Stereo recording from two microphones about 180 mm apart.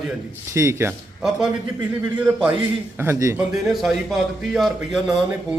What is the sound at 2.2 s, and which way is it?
A man's voice, 5° right (ahead or behind).